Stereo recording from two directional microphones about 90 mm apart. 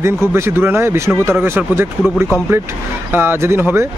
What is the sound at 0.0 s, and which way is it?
Speech, 30° right (ahead or behind).